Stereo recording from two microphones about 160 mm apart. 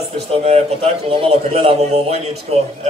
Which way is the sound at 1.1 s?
40° right (ahead or behind).